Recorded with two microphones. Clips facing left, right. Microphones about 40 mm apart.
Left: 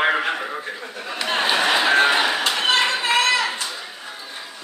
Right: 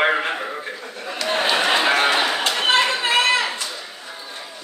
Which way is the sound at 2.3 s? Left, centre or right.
Centre.